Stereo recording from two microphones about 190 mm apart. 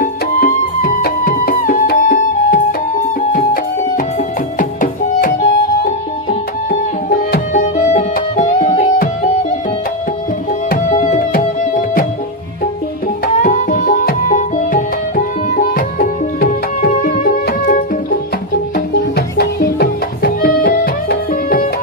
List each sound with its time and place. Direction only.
0.0 s music: 45° left (ahead or behind)
6.7 s music: 45° left (ahead or behind)
10.7 s music: 40° left (ahead or behind)
13.4 s music: 40° left (ahead or behind)